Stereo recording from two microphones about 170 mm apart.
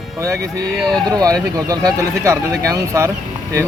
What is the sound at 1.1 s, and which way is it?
Speech, 20° right (ahead or behind).